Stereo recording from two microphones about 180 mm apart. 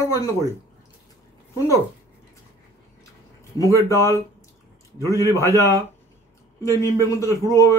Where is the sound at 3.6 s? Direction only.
20° left (ahead or behind).